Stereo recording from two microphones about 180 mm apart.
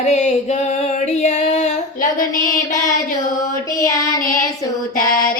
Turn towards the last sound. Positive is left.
turn(degrees=20)  # may be behind; listen again after turning